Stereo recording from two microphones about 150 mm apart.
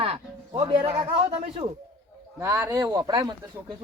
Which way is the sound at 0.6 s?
30° right (ahead or behind).